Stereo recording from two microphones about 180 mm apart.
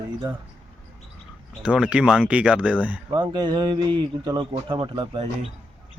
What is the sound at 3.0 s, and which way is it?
A man's voice, 25° right (ahead or behind).